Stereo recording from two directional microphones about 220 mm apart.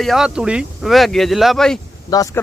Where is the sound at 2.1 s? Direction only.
15° left (ahead or behind).